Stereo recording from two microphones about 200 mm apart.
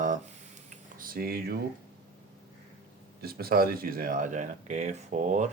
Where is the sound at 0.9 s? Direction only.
45° right (ahead or behind).